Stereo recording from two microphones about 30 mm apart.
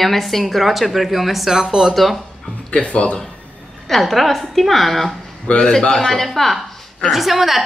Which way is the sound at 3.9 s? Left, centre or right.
Centre.